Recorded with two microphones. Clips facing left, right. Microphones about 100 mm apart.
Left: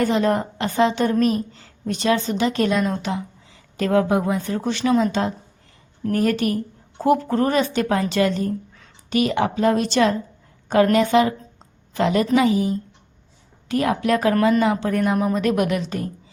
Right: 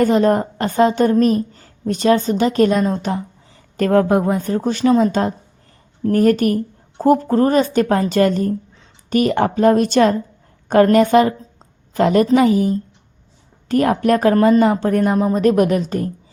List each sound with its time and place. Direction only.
0.0 s a woman's voice: 45° right (ahead or behind)